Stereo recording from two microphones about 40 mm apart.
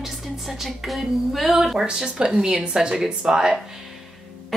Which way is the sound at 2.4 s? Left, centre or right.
Right.